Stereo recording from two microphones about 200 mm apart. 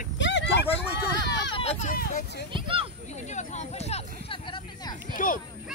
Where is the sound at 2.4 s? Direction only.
25° right (ahead or behind).